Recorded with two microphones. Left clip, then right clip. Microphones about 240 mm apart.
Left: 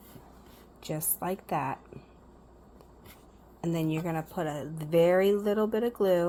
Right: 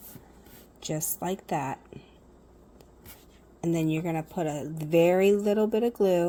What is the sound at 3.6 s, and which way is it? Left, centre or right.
A woman's voice, right.